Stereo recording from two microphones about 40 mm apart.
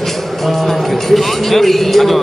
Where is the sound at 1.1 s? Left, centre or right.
Centre.